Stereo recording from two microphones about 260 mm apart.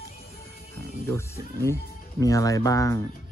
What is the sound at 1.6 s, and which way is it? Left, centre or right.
Speech, centre.